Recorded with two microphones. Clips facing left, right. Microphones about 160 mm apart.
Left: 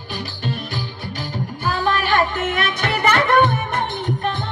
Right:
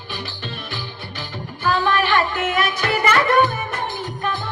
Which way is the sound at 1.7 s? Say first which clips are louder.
Right 1 dB; 40° left (ahead or behind).